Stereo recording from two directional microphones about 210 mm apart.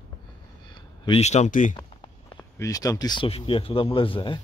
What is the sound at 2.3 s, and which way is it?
Speech, 15° left (ahead or behind).